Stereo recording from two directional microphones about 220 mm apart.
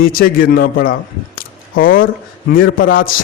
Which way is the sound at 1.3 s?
40° left (ahead or behind).